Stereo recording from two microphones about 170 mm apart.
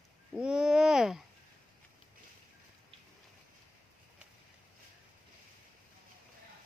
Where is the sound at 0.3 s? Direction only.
5° right (ahead or behind).